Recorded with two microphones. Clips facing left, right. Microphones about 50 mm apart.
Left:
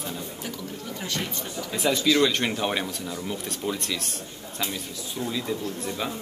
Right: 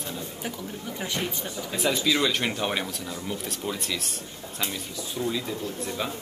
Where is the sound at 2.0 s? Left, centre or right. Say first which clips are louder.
Left 5 dB; centre.